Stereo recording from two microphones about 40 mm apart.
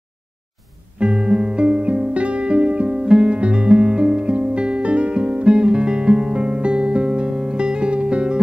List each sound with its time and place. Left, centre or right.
0.9 s music: right
4.3 s guitar: right